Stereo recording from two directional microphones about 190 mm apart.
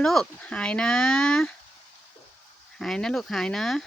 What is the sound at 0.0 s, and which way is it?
Speech, centre (ahead or behind).